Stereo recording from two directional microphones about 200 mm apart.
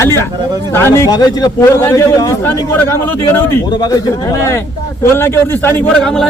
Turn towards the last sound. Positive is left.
turn(degrees=5)  # may be behind; listen again after turning